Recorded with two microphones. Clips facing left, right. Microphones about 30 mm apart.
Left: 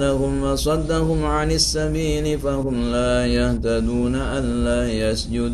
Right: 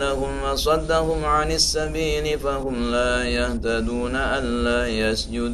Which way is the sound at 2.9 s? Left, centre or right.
Centre.